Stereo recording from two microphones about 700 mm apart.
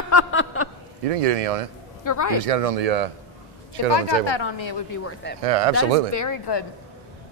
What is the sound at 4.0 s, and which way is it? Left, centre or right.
Speech, left.